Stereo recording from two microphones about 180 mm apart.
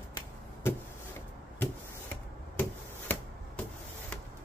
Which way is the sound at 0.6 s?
15° left (ahead or behind).